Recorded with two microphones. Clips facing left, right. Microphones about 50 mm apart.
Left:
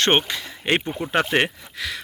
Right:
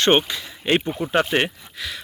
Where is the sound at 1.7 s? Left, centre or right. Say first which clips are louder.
Left 2 dB; left.